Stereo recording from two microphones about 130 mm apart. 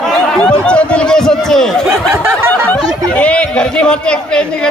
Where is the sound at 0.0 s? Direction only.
Centre (ahead or behind).